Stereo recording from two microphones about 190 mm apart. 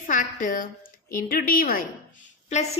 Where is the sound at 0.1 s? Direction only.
45° left (ahead or behind).